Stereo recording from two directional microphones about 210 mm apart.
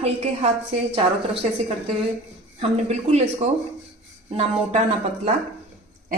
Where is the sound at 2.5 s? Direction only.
30° right (ahead or behind).